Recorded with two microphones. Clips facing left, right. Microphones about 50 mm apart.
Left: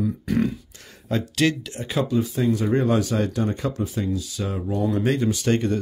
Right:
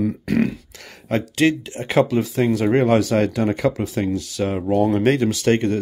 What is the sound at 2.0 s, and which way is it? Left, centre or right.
Speech, right.